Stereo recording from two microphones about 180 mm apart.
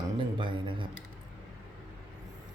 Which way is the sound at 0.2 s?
25° right (ahead or behind).